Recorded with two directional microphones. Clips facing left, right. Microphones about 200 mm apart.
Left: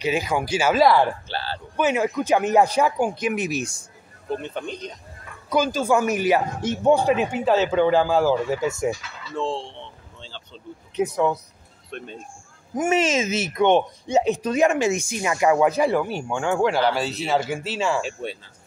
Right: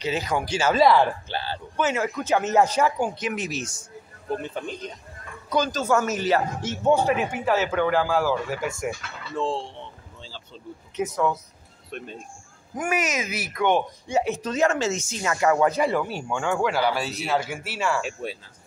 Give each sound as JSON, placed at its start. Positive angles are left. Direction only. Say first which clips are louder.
{"t": 0.0, "sound": "speech", "louder": "left 3 dB", "side_deg": 10}
{"t": 1.3, "sound": "speech", "louder": "even", "side_deg": -15}
{"t": 1.8, "sound": "speech", "louder": "left 4 dB", "side_deg": 15}
{"t": 4.4, "sound": "speech", "louder": "left 1 dB", "side_deg": -5}
{"t": 5.5, "sound": "speech", "louder": "left 2 dB", "side_deg": 10}
{"t": 9.3, "sound": "boat", "louder": "even", "side_deg": -5}
{"t": 11.0, "sound": "speech", "louder": "left 3 dB", "side_deg": 15}
{"t": 11.9, "sound": "speech", "louder": "left 1 dB", "side_deg": -5}
{"t": 12.7, "sound": "speech", "louder": "left 6 dB", "side_deg": 25}
{"t": 16.8, "sound": "speech", "louder": "left 3 dB", "side_deg": -10}
{"t": 17.7, "sound": "speech", "louder": "left 2 dB", "side_deg": 20}
{"t": 18.0, "sound": "speech", "louder": "left 1 dB", "side_deg": -5}